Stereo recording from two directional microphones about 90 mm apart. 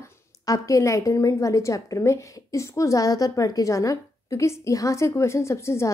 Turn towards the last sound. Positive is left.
turn(degrees=30)  # may be behind; listen again after turning